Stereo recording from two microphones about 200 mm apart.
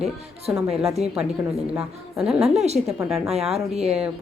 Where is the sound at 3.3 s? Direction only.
30° right (ahead or behind).